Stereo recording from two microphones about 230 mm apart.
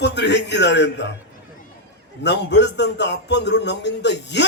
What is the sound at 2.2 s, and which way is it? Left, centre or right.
A man's voice, left.